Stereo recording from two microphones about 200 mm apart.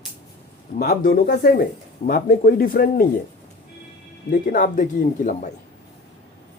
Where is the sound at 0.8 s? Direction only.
50° left (ahead or behind).